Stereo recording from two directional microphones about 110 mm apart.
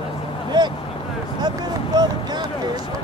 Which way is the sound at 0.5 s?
40° right (ahead or behind).